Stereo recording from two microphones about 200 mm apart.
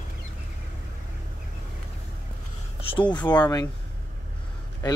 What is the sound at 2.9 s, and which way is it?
Speech, 25° left (ahead or behind).